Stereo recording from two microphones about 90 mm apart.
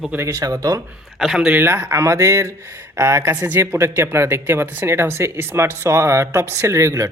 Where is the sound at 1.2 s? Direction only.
5° right (ahead or behind).